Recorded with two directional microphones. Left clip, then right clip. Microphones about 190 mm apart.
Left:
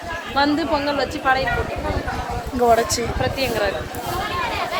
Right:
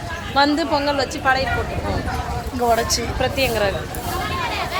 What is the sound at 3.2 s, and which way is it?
Speech, 40° right (ahead or behind).